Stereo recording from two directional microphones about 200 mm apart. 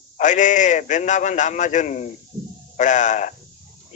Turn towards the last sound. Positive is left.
turn(degrees=40)  # may be behind; listen again after turning